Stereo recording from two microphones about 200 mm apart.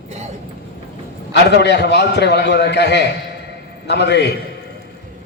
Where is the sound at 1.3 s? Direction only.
60° left (ahead or behind).